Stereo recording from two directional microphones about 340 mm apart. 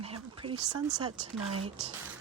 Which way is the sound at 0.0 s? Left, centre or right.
Centre.